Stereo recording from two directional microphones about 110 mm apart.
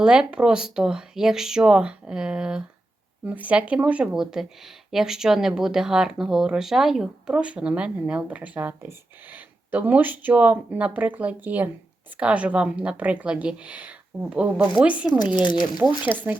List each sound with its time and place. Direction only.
0.0 s speech: 10° right (ahead or behind)
15.4 s speech: 45° left (ahead or behind)
15.8 s speech: 15° right (ahead or behind)